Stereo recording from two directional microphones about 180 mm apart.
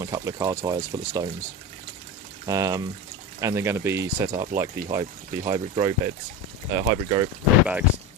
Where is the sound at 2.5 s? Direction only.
20° right (ahead or behind).